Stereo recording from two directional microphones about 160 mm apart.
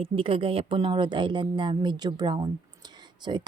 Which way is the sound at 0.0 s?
35° right (ahead or behind).